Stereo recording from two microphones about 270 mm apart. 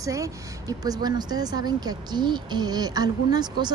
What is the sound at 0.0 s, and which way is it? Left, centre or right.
Speech, centre.